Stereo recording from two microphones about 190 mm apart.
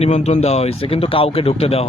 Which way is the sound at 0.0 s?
35° left (ahead or behind).